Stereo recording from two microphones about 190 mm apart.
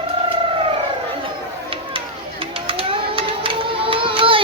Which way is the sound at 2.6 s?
30° right (ahead or behind).